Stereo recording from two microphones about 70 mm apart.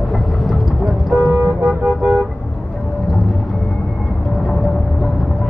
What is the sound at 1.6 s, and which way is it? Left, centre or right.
Vehicle, right.